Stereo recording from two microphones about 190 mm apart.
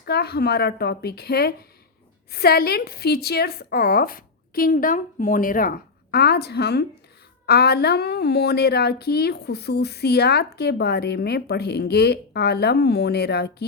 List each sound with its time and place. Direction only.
0.0 s a woman's voice: 55° left (ahead or behind)